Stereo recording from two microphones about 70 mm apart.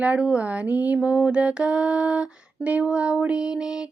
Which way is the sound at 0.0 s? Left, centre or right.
Centre.